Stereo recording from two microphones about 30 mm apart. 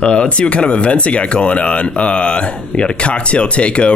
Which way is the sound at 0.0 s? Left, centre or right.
Left.